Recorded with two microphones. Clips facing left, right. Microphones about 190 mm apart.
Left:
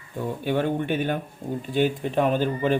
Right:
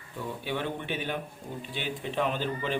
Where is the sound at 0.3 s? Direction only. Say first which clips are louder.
Left 8 dB; 50° left (ahead or behind).